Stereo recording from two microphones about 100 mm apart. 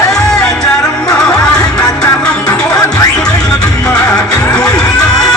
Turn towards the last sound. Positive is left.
turn(degrees=10)  # may be behind; listen again after turning